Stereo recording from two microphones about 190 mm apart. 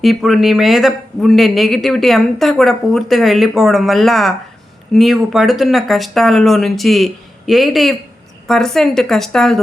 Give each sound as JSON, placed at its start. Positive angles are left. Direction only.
{"t": 0.0, "sound": "speech", "side_deg": 0}